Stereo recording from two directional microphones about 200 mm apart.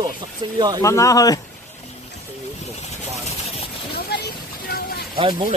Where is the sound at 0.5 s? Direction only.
20° right (ahead or behind).